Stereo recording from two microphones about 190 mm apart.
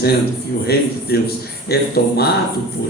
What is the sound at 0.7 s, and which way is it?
A man's voice, 55° left (ahead or behind).